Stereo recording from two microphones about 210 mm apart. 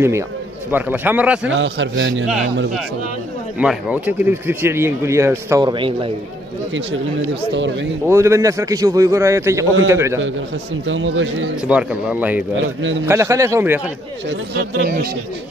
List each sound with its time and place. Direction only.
0.7 s speech: 10° right (ahead or behind)
1.5 s speech: 60° right (ahead or behind)
3.5 s speech: 5° right (ahead or behind); by 6.1 s 25° right (ahead or behind)
6.7 s speech: 60° right (ahead or behind)
8.1 s speech: 15° right (ahead or behind)
10.9 s speech: 65° right (ahead or behind)
11.6 s speech: 5° right (ahead or behind)
12.5 s speech: 65° right (ahead or behind)
13.0 s speech: 15° right (ahead or behind)
14.5 s speech: 50° right (ahead or behind)